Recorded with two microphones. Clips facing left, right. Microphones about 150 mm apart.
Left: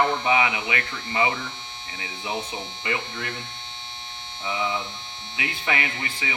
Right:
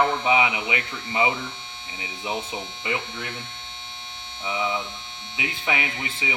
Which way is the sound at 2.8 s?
5° right (ahead or behind).